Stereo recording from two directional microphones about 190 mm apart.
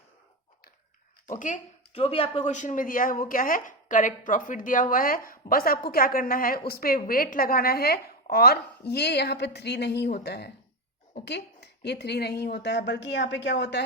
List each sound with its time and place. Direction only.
1.3 s speech: 40° left (ahead or behind); by 13.8 s 65° left (ahead or behind)